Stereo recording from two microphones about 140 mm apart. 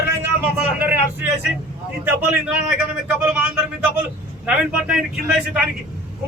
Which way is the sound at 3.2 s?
10° right (ahead or behind).